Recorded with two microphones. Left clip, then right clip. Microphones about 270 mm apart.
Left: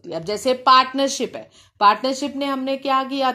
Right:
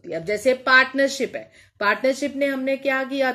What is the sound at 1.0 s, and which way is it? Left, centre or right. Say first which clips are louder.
A woman's voice: even; left.